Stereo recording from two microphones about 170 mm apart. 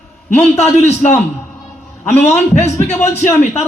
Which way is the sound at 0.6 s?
40° left (ahead or behind).